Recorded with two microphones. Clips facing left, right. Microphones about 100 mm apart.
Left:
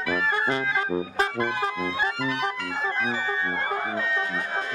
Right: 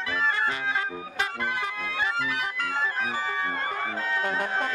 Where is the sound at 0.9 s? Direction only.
35° left (ahead or behind).